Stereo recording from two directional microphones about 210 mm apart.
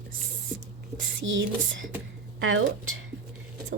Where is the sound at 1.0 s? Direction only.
60° right (ahead or behind).